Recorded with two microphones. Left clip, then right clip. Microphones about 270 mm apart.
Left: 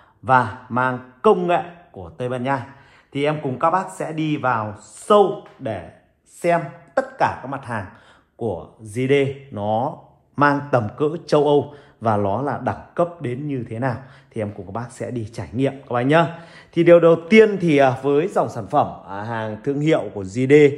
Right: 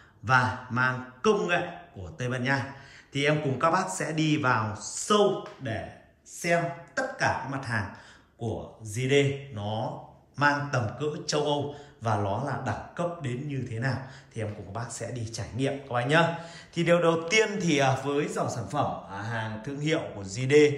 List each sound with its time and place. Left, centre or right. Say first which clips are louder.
0.2 s a woman's voice: left 7 dB; centre
8.8 s a man's voice: left 6 dB; left